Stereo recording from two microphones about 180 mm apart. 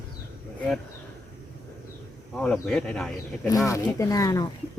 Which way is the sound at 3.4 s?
20° left (ahead or behind).